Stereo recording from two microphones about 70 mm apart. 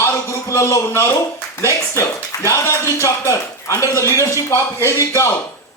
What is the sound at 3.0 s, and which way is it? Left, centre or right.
A man's voice, left.